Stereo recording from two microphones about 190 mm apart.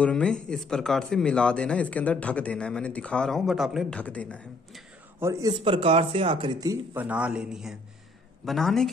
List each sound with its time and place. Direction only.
0.0 s speech: 5° left (ahead or behind)
5.2 s a man's voice: 20° right (ahead or behind)
5.6 s speech: 30° right (ahead or behind)
6.7 s a man's voice: 10° right (ahead or behind)